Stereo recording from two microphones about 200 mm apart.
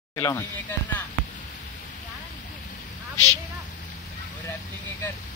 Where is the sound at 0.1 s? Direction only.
15° left (ahead or behind).